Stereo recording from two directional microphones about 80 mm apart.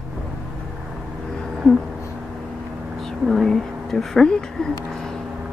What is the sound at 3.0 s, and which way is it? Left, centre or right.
Speech, centre.